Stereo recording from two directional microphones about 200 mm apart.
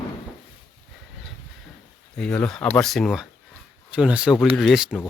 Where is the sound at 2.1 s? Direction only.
5° left (ahead or behind).